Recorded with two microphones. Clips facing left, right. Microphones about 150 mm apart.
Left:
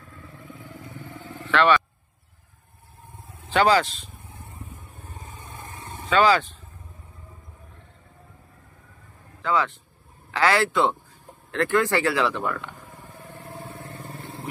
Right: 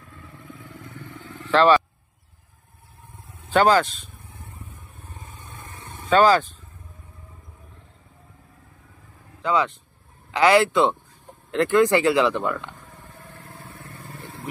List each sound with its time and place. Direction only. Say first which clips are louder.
1.5 s speech: right 3 dB; 35° right (ahead or behind)
3.4 s speech: right 2 dB; 50° right (ahead or behind)
6.0 s speech: right 3 dB; 45° right (ahead or behind)
9.4 s a man's voice: right 2 dB; 20° right (ahead or behind)
12.7 s vehicle: left 2 dB; 10° left (ahead or behind)
13.7 s vehicle: left 3 dB; 30° left (ahead or behind)